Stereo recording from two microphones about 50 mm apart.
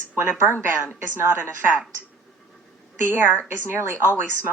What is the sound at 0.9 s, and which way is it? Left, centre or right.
Speech, right.